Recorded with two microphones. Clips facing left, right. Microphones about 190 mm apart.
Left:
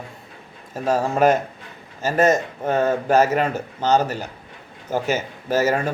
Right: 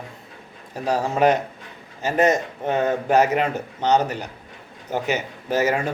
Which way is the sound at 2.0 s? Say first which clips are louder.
Left 1 dB; 15° right (ahead or behind).